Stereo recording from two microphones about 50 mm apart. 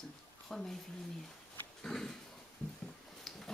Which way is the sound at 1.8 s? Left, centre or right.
Centre.